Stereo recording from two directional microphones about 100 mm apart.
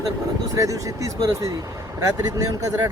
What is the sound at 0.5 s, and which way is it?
Speech, 35° right (ahead or behind).